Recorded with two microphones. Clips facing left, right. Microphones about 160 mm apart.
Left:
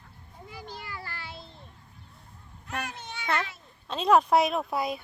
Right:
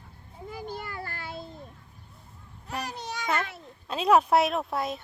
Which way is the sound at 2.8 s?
35° right (ahead or behind).